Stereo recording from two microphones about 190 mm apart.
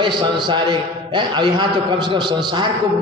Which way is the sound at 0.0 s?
20° right (ahead or behind).